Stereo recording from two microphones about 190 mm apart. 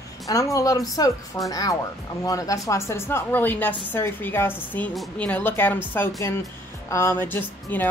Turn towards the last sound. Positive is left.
turn(degrees=10)  # may be behind; listen again after turning